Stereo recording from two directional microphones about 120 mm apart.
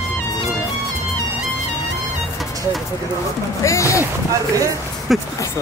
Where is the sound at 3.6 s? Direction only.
25° left (ahead or behind).